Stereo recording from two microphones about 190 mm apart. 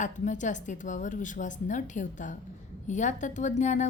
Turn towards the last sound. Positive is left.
turn(degrees=40)  # may be behind; listen again after turning